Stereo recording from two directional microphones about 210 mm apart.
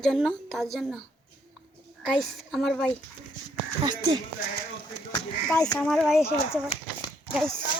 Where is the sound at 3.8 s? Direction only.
20° right (ahead or behind).